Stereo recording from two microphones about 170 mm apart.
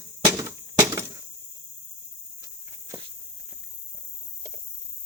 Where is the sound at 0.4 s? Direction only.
20° right (ahead or behind).